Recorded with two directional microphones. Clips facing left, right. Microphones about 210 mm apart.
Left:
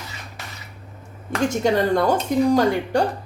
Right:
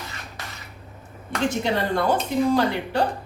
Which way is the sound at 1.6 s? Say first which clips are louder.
Left 8 dB; 40° left (ahead or behind).